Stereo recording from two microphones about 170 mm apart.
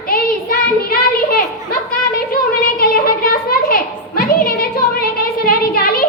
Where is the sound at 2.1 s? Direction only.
60° left (ahead or behind).